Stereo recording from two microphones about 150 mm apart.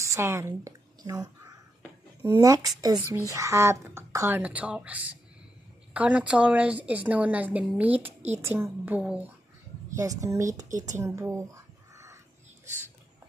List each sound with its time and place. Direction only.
0.0 s a woman's voice: 20° right (ahead or behind)
2.4 s speech: 25° right (ahead or behind)
4.4 s a woman's voice: 10° right (ahead or behind)
9.9 s speech: 20° right (ahead or behind)
11.9 s a sound: 20° right (ahead or behind)